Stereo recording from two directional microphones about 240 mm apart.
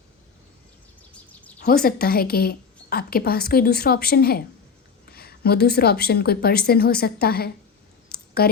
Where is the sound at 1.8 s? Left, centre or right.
Left.